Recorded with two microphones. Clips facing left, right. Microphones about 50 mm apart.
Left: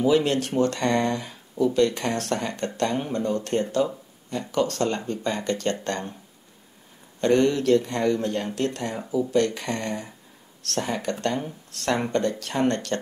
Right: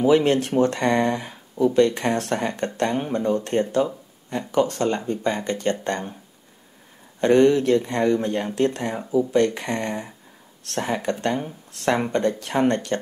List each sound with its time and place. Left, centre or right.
0.0 s speech: right
7.2 s speech: right